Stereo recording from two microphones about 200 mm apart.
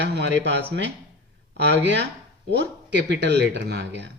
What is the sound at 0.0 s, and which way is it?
Speech, 60° right (ahead or behind).